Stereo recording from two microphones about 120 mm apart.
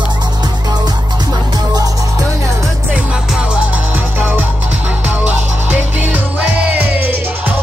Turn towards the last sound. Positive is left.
turn(degrees=-15)  # may be behind; listen again after turning